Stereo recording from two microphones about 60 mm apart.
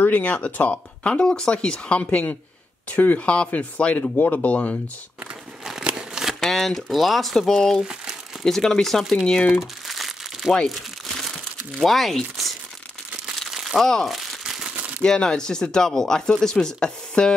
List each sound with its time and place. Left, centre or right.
0.0 s speech: left
5.9 s crumpling: centre
6.4 s speech: centre
7.8 s crumpling: centre
8.5 s speech: centre
9.5 s crumpling: centre
11.8 s speech: centre
13.5 s crumpling: centre
13.8 s speech: centre
14.1 s crumpling: centre
15.0 s speech: centre